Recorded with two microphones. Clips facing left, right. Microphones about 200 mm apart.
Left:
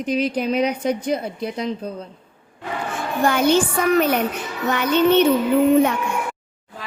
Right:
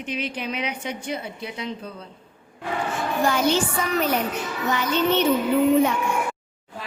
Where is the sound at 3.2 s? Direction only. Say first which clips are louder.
Left 5 dB; 55° left (ahead or behind).